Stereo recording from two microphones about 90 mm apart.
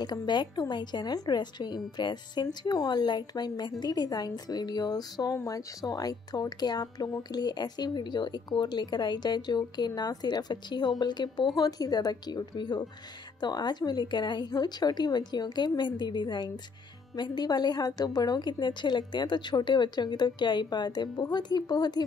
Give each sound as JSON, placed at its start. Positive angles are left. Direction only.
{"t": 0.0, "sound": "speech", "side_deg": 50}
{"t": 5.3, "sound": "speech", "side_deg": 35}